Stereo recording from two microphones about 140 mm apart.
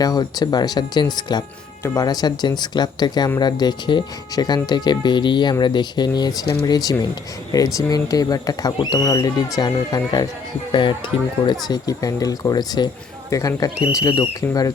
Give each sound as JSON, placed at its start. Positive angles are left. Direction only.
{"t": 0.0, "sound": "speech", "side_deg": 30}
{"t": 11.7, "sound": "speech", "side_deg": 25}